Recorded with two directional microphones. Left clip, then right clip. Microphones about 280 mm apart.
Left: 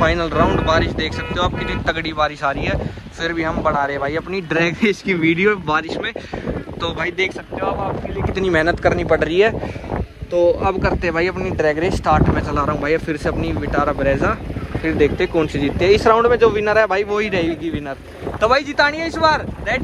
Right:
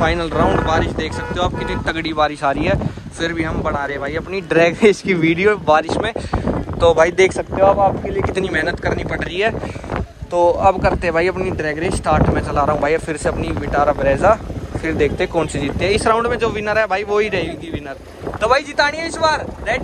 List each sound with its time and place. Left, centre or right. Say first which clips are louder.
0.0 s speech: even; centre; by 7.7 s right
8.5 s speech: left 3 dB; centre
10.3 s speech: right 2 dB; centre